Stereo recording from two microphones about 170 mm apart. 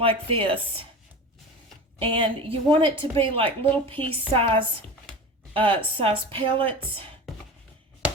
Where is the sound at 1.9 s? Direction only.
30° right (ahead or behind).